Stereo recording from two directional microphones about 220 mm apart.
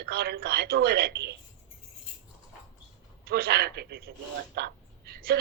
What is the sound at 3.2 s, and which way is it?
A man's voice, 45° right (ahead or behind).